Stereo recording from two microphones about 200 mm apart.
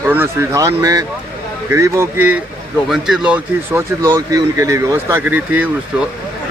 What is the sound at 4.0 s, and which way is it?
Speech, 20° right (ahead or behind).